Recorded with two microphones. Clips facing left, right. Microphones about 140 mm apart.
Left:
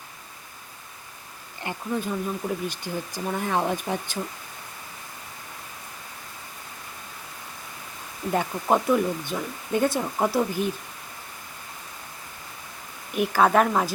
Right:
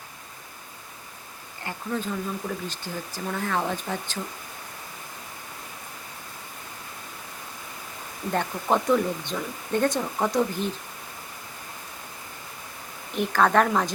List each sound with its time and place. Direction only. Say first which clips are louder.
1.6 s speech: left 2 dB; 15° left (ahead or behind)
8.3 s speech: left 2 dB; 10° left (ahead or behind)
13.1 s speech: left 1 dB; 10° left (ahead or behind)